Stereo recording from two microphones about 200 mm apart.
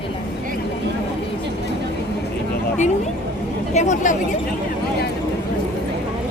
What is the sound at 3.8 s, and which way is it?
Speech, 40° left (ahead or behind).